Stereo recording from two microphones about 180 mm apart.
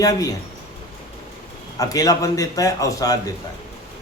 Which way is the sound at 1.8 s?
20° left (ahead or behind).